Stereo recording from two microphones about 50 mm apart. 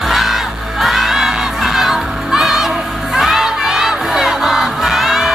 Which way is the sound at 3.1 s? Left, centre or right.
Centre.